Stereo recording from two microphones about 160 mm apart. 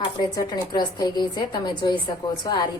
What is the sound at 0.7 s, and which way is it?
A woman's voice, 25° left (ahead or behind).